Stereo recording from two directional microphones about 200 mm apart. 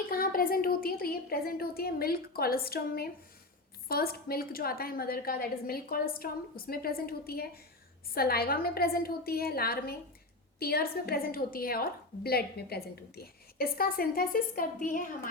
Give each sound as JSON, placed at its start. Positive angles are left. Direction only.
{"t": 0.1, "sound": "a woman's voice", "side_deg": 45}